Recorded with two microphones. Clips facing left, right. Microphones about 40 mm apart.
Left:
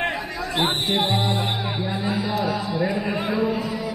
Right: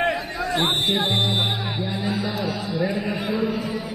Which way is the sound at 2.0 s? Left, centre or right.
Centre.